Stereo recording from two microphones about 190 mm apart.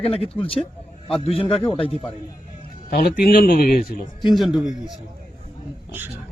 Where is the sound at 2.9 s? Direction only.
55° left (ahead or behind).